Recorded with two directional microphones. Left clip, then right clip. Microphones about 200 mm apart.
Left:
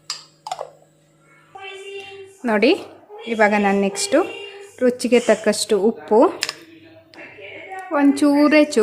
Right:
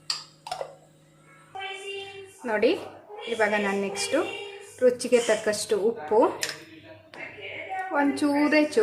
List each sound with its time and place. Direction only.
2.4 s a woman's voice: 50° left (ahead or behind)
7.9 s a woman's voice: 45° left (ahead or behind)